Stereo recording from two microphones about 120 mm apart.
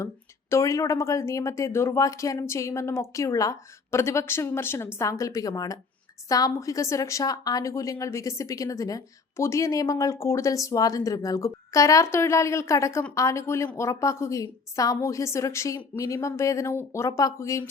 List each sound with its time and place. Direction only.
0.5 s speech: 25° left (ahead or behind)